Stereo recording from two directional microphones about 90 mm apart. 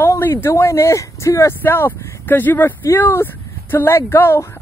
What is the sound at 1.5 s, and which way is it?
Speech, 25° left (ahead or behind).